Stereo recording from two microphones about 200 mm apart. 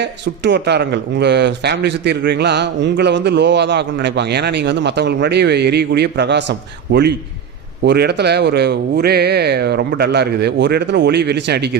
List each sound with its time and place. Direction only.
0.0 s a man's voice: 60° right (ahead or behind)